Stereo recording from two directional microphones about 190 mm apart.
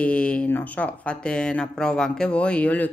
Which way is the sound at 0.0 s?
5° left (ahead or behind).